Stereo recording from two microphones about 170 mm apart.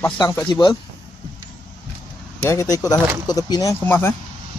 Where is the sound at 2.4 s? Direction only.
15° left (ahead or behind).